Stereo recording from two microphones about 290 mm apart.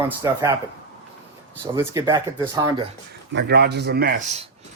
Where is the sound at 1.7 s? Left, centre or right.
Centre.